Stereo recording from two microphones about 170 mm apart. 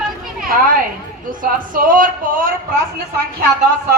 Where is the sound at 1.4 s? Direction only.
55° right (ahead or behind).